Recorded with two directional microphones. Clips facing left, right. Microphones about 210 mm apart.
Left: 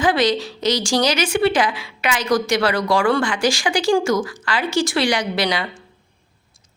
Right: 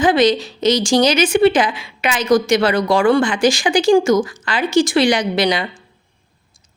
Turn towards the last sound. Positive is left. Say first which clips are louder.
# right 4 dB
turn(degrees=-20)  # may be behind; listen again after turning